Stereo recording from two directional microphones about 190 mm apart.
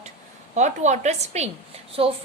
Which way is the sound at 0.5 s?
40° right (ahead or behind).